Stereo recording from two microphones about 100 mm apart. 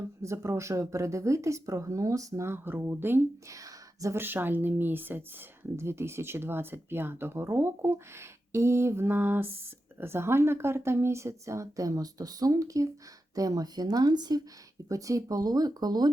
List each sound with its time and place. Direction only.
0.2 s speech: 30° right (ahead or behind)
3.5 s a sound: 35° right (ahead or behind)
4.2 s speech: 20° right (ahead or behind); by 16.1 s 45° right (ahead or behind)